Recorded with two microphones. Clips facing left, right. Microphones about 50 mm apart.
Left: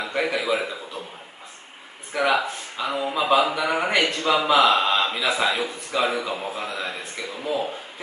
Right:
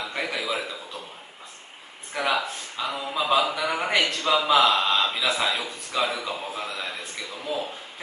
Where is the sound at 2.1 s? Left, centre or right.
Centre.